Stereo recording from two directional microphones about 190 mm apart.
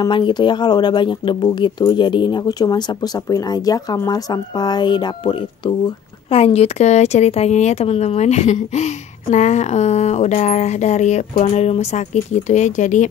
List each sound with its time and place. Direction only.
0.0 s speech: 25° left (ahead or behind); by 13.1 s 40° left (ahead or behind)